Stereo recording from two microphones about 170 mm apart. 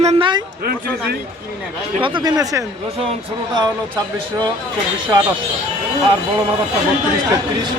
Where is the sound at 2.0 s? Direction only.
30° right (ahead or behind).